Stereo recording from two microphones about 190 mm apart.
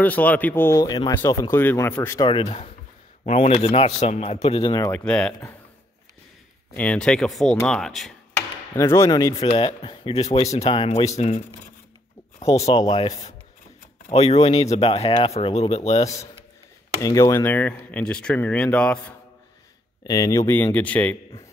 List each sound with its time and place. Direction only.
0.0 s speech: 10° left (ahead or behind); by 4.8 s 25° left (ahead or behind)
4.8 s speech: 5° left (ahead or behind)
6.7 s speech: 5° left (ahead or behind)
8.7 s speech: 15° left (ahead or behind)
9.4 s speech: 30° left (ahead or behind)
17.0 s speech: 15° left (ahead or behind)
20.0 s speech: 20° left (ahead or behind)